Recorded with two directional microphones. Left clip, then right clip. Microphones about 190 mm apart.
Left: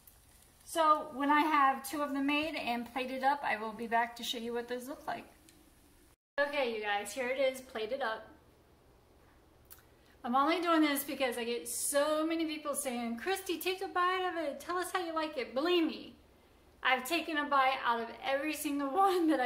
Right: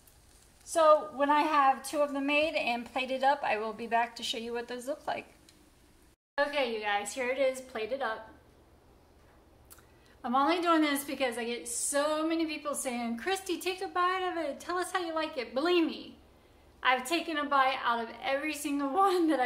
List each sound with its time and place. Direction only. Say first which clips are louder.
0.7 s a woman's voice: right 5 dB; 30° right (ahead or behind)
6.3 s a woman's voice: right 3 dB; 5° right (ahead or behind)
10.2 s a woman's voice: right 3 dB; centre (ahead or behind)